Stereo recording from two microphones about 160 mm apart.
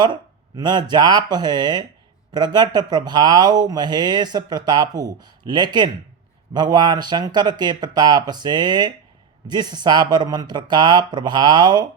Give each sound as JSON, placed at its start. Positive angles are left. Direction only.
{"t": 0.0, "sound": "speech", "side_deg": -25}